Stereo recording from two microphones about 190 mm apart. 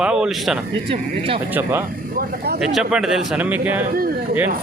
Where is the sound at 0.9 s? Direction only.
30° right (ahead or behind).